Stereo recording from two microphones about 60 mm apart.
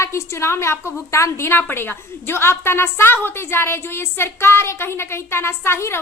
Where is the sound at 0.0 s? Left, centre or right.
Left.